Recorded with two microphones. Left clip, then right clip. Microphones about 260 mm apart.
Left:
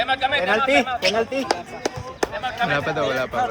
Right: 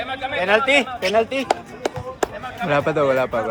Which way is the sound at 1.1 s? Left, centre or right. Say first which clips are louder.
Right 3 dB; right.